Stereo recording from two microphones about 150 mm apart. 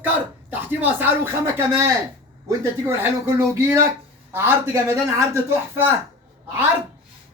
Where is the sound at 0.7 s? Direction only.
15° right (ahead or behind).